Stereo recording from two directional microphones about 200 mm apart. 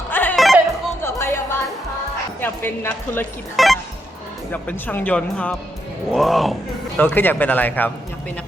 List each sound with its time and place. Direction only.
0.1 s music: 10° left (ahead or behind)
1.0 s music: 10° left (ahead or behind)
2.4 s speech: 10° left (ahead or behind)
3.5 s speech: centre (ahead or behind)